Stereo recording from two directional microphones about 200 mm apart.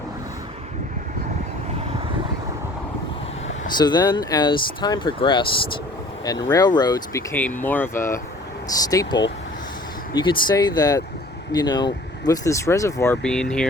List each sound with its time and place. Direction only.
3.7 s speech: 20° left (ahead or behind)
13.2 s speech: 5° left (ahead or behind)